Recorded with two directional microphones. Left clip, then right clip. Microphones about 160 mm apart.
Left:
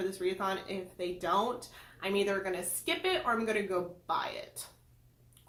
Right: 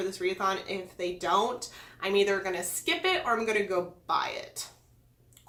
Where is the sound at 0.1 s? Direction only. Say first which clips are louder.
Right 4 dB; 10° right (ahead or behind).